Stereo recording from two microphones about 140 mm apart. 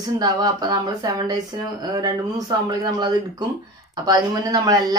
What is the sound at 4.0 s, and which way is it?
Speech, 30° right (ahead or behind).